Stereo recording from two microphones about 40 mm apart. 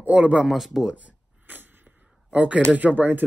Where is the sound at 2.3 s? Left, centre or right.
Right.